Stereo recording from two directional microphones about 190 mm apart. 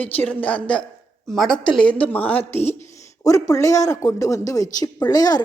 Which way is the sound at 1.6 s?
25° left (ahead or behind).